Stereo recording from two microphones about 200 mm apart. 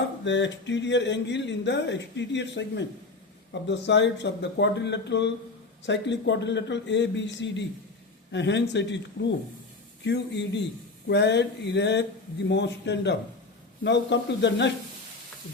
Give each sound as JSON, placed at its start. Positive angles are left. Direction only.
{"t": 0.3, "sound": "speech", "side_deg": 60}
{"t": 10.0, "sound": "speech", "side_deg": 60}